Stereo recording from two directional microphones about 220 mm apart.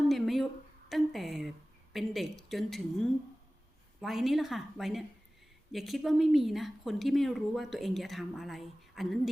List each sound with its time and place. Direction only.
0.1 s a sound: centre (ahead or behind)
0.9 s a woman's voice: centre (ahead or behind)
4.0 s speech: centre (ahead or behind)